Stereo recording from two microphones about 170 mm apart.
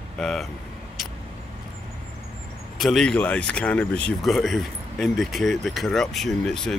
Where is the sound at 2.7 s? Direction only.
Centre (ahead or behind).